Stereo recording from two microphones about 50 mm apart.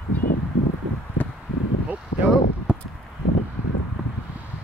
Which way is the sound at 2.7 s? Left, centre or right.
Centre.